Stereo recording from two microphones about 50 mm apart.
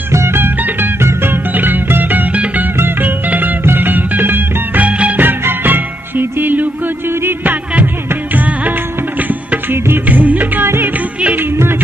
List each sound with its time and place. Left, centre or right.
0.1 s music: right
2.3 s music: right
4.8 s music: right
5.2 s music: right
8.1 s music: right